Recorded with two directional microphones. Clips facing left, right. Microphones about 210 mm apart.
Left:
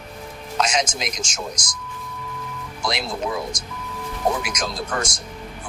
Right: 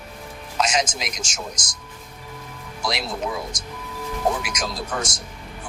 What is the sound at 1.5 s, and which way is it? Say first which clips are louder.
Speech: left 4 dB; 25° right (ahead or behind).